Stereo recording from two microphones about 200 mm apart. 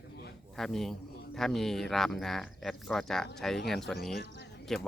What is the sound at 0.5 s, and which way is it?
Speech, centre (ahead or behind).